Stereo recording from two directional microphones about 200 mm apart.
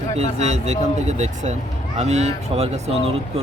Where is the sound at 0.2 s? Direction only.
35° right (ahead or behind).